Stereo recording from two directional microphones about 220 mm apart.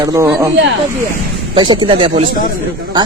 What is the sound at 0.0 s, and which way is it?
Speech, 15° right (ahead or behind).